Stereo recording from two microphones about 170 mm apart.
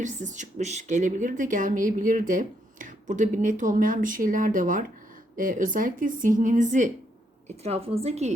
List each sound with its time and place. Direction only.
0.0 s a woman's voice: 45° right (ahead or behind)